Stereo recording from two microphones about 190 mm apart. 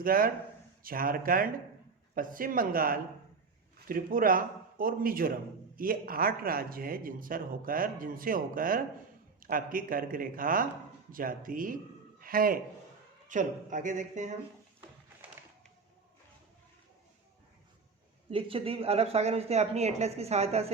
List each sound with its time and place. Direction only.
0.0 s a man's voice: 50° right (ahead or behind)
18.3 s a woman's voice: 30° right (ahead or behind)